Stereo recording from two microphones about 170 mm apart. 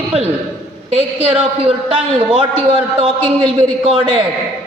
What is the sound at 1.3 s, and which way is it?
Speech, 35° right (ahead or behind).